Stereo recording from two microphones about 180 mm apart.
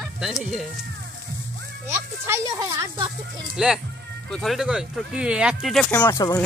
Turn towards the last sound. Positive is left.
turn(degrees=20)  # may be behind; listen again after turning